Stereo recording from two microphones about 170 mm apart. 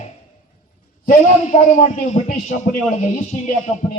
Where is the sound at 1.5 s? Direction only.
45° left (ahead or behind).